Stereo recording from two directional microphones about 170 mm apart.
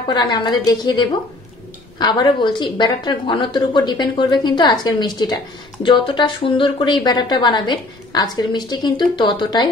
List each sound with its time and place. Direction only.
0.1 s a woman's voice: 25° left (ahead or behind)